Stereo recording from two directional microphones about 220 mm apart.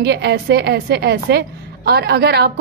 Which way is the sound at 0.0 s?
50° right (ahead or behind).